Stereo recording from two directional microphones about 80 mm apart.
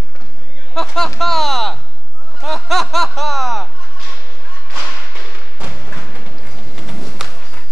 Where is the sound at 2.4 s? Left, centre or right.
Centre.